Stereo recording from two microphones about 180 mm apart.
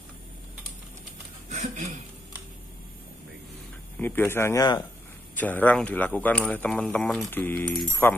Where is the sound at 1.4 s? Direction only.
45° right (ahead or behind).